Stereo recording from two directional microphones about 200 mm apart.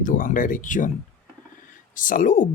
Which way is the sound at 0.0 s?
40° left (ahead or behind).